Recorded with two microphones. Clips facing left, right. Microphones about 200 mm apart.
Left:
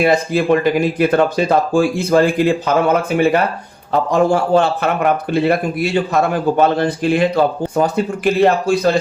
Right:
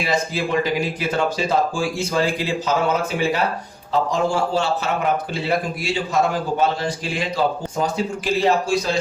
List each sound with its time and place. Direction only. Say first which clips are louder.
0.0 s a man's voice: left 8 dB; 55° left (ahead or behind)